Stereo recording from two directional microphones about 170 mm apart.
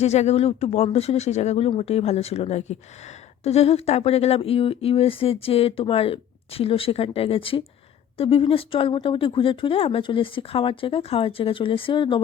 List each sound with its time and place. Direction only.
0.0 s speech: 40° left (ahead or behind)